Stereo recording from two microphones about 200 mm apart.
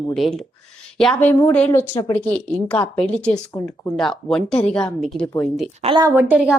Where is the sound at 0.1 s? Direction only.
Centre (ahead or behind).